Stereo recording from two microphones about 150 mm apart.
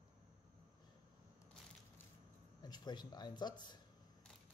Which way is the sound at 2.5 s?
25° left (ahead or behind).